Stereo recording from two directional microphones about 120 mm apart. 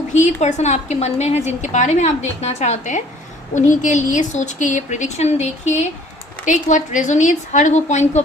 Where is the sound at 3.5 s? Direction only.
90° left; by 5.8 s 70° left (ahead or behind).